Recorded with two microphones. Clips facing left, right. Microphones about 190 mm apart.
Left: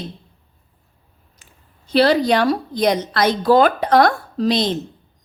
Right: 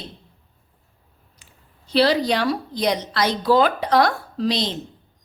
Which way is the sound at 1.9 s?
50° left (ahead or behind).